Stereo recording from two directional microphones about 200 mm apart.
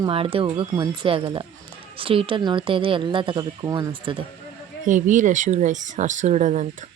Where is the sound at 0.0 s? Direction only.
30° right (ahead or behind).